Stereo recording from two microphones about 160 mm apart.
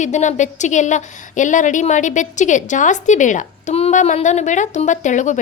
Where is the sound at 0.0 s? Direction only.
50° left (ahead or behind).